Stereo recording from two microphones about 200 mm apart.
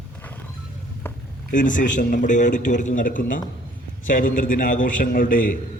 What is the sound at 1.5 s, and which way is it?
A man's voice, 40° left (ahead or behind).